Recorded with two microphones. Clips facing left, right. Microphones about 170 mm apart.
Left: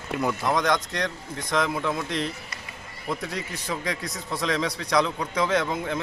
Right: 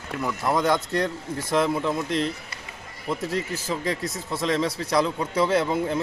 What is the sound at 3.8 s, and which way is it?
Speech, 25° right (ahead or behind).